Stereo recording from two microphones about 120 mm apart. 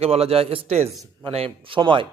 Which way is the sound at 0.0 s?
55° right (ahead or behind).